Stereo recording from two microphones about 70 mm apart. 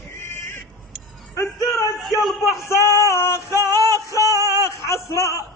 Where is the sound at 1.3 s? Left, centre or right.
Left.